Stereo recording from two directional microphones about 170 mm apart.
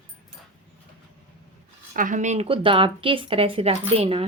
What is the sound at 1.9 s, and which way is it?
A woman's voice, 50° right (ahead or behind).